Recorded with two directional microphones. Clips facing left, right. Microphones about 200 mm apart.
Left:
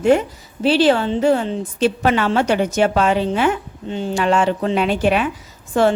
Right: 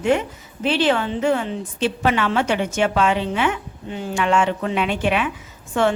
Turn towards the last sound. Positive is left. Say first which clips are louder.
# left 4 dB
turn(degrees=35)  # may be behind; listen again after turning